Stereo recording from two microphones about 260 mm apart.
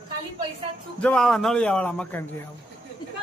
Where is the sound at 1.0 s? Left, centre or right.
Centre.